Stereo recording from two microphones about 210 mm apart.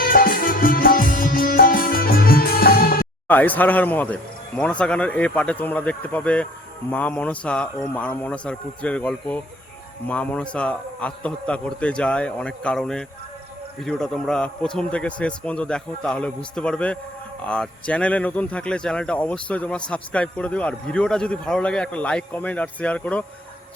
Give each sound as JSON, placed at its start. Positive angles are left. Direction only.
{"t": 0.0, "sound": "music", "side_deg": 40}
{"t": 3.2, "sound": "speech", "side_deg": 10}